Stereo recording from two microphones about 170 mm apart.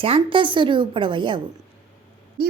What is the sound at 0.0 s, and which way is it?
A woman's voice, 30° right (ahead or behind).